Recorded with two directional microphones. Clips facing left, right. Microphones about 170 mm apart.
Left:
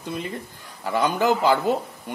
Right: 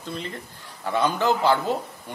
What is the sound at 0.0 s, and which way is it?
A man's voice, 15° left (ahead or behind).